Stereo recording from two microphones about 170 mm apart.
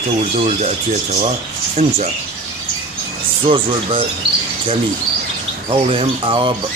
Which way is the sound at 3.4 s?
30° right (ahead or behind).